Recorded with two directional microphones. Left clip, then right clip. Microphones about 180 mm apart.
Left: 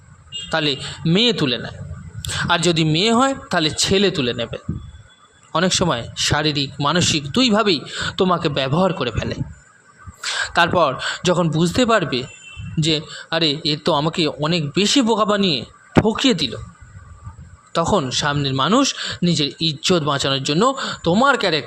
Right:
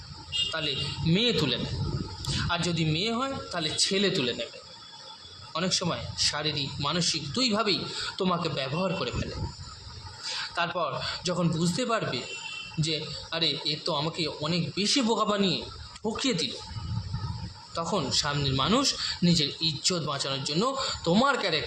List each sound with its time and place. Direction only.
0.5 s speech: 50° left (ahead or behind)
2.4 s speech: 55° left (ahead or behind); by 4.4 s 40° left (ahead or behind)
5.5 s speech: 55° left (ahead or behind)
10.3 s speech: 55° left (ahead or behind)
17.7 s speech: 50° left (ahead or behind); by 21.2 s 35° left (ahead or behind)
21.2 s speech: 45° left (ahead or behind)